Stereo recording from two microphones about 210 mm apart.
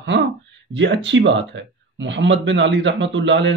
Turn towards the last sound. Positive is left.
turn(degrees=-60)  # may be behind; listen again after turning